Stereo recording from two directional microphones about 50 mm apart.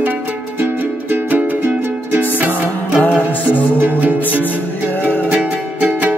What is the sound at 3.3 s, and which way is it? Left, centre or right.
Music, left.